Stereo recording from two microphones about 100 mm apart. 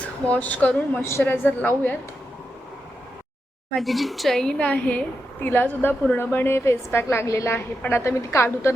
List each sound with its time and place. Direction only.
0.3 s speech: 15° left (ahead or behind)
3.8 s speech: centre (ahead or behind); by 8.7 s 25° left (ahead or behind)